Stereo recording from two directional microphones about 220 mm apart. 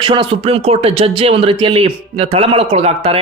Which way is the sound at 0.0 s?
20° right (ahead or behind).